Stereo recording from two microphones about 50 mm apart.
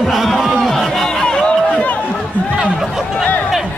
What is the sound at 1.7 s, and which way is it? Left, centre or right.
Run, left.